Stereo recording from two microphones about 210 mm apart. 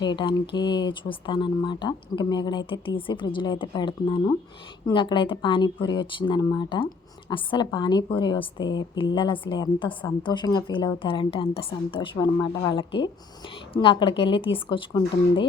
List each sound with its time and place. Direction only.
0.0 s speech: 20° left (ahead or behind)